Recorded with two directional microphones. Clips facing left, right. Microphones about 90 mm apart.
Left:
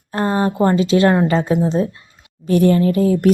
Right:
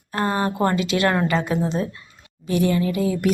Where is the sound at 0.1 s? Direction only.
25° left (ahead or behind).